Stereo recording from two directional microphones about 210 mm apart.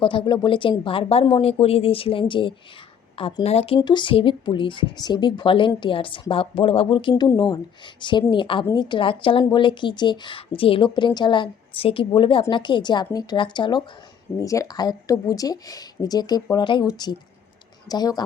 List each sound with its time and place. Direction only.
0.0 s a woman's voice: 25° left (ahead or behind)